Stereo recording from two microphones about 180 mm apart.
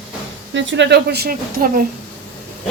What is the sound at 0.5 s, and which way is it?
Speech, 85° right.